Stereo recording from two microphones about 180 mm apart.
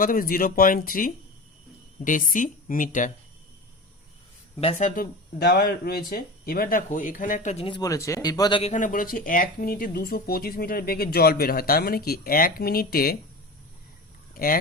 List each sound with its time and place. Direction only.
0.0 s speech: 50° left (ahead or behind)
4.6 s speech: 45° left (ahead or behind); by 8.7 s 25° left (ahead or behind)
8.7 s speech: 45° left (ahead or behind)
14.3 s speech: 55° left (ahead or behind)